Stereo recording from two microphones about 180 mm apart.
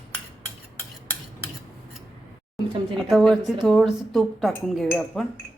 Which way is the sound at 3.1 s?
Centre (ahead or behind).